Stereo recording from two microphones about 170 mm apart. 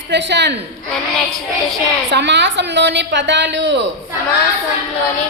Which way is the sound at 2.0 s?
90° right.